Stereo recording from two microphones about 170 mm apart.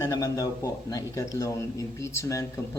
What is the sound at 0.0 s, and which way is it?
Speech, 20° left (ahead or behind).